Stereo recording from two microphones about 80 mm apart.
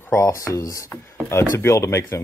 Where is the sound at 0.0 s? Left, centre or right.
Left.